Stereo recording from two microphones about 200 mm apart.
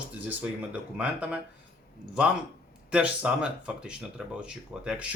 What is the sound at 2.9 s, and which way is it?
Speech, 5° right (ahead or behind).